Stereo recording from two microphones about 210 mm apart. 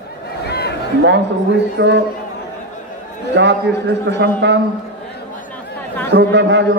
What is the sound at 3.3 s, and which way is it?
Speech, 55° right (ahead or behind).